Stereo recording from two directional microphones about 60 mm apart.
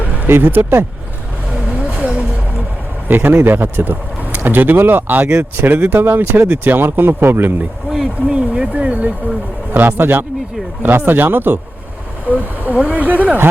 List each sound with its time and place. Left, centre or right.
0.3 s speech: right
1.8 s vehicle: right
3.1 s speech: right
7.9 s speech: centre
8.4 s speech: centre
9.7 s speech: right
12.4 s speech: right